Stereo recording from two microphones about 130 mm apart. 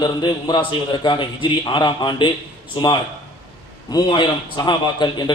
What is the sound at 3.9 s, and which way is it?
A man's voice, 35° left (ahead or behind).